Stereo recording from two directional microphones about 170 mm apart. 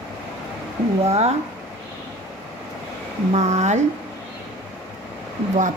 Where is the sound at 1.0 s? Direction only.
40° right (ahead or behind).